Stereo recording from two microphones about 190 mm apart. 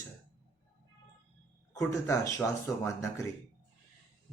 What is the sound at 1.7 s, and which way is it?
Speech, 15° left (ahead or behind).